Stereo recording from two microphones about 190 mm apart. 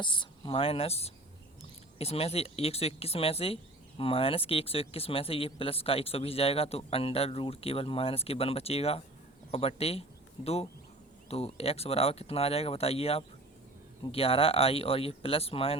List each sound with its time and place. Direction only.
0.0 s speech: 25° left (ahead or behind)